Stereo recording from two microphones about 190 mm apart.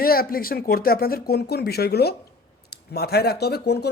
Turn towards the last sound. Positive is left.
turn(degrees=60)  # may be behind; listen again after turning